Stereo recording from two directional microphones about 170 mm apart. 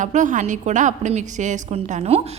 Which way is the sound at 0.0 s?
45° right (ahead or behind).